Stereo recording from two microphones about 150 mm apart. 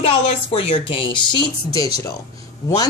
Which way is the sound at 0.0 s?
40° left (ahead or behind).